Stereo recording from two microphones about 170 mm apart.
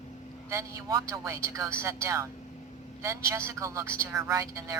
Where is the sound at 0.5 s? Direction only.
20° right (ahead or behind).